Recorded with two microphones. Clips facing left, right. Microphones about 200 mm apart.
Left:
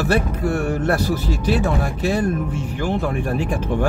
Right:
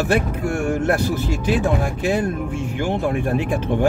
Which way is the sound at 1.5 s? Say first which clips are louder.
Even; 15° right (ahead or behind).